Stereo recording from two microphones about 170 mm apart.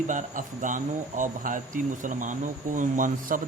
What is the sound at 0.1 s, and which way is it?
Speech, 50° right (ahead or behind).